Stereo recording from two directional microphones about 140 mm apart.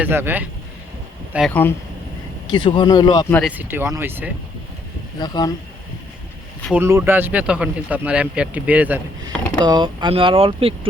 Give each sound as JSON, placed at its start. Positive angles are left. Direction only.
{"t": 0.0, "sound": "speech", "side_deg": -15}
{"t": 1.5, "sound": "speech", "side_deg": 10}
{"t": 2.5, "sound": "speech", "side_deg": 35}
{"t": 3.4, "sound": "speech", "side_deg": -10}
{"t": 5.2, "sound": "speech", "side_deg": 30}
{"t": 6.7, "sound": "speech", "side_deg": -15}
{"t": 9.6, "sound": "speech", "side_deg": -30}